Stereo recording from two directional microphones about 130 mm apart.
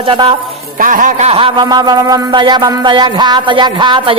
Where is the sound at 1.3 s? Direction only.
45° right (ahead or behind).